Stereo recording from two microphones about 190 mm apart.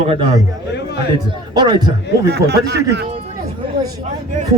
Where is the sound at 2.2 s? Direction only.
60° right (ahead or behind).